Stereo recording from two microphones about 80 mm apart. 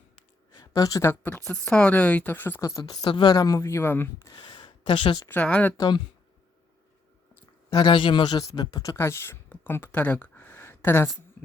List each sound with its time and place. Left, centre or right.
0.6 s a sound: left
1.3 s speech: centre
2.6 s speech: left
3.3 s speech: left
4.5 s a sound: left
5.3 s speech: centre
5.7 s speech: left
7.7 s speech: left
9.0 s speech: left